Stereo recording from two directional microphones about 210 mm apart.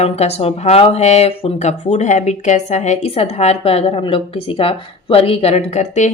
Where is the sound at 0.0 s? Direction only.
30° left (ahead or behind).